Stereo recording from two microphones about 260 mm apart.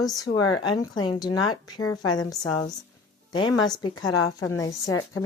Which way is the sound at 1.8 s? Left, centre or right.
Left.